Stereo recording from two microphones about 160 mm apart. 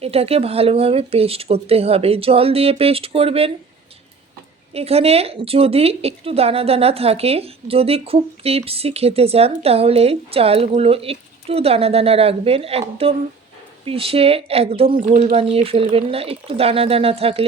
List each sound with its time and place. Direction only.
0.0 s a woman's voice: 40° right (ahead or behind)
4.7 s a woman's voice: 40° right (ahead or behind)